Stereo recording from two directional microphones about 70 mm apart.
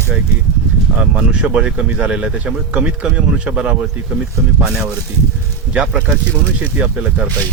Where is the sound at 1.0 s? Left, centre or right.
Centre.